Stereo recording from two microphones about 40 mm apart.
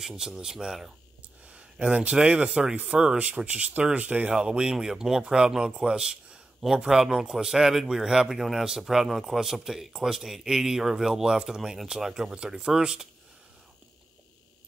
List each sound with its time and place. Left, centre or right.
0.0 s speech: centre
1.5 s speech: right
3.2 s speech: right
4.7 s speech: centre